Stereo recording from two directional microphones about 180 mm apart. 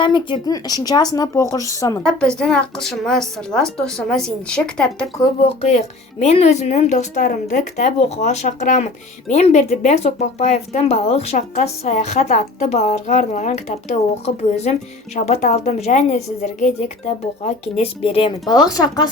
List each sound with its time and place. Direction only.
0.0 s speech: 25° left (ahead or behind)
2.0 s speech: 5° left (ahead or behind)
5.4 s speech: 35° left (ahead or behind)